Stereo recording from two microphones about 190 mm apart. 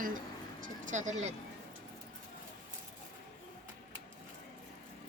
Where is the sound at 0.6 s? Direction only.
40° right (ahead or behind).